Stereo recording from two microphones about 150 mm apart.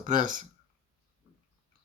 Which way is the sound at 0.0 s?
60° right (ahead or behind).